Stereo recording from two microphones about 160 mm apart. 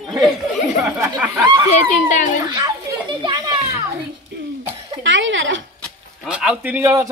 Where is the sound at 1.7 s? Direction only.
50° left (ahead or behind).